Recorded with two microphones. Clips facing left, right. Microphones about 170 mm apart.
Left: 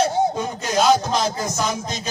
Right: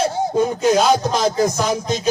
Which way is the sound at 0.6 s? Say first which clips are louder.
Even; 50° right (ahead or behind).